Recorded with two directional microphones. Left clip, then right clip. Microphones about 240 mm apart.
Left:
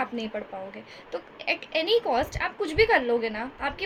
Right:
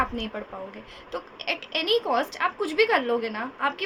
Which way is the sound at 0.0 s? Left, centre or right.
Centre.